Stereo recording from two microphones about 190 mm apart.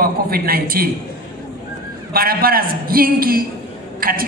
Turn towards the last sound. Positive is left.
turn(degrees=-50)  # may be behind; listen again after turning